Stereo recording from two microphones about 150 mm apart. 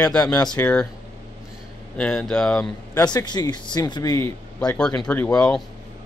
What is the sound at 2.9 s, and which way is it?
Speech, 30° left (ahead or behind).